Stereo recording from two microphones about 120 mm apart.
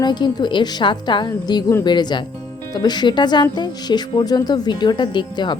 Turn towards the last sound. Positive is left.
turn(degrees=40)  # may be behind; listen again after turning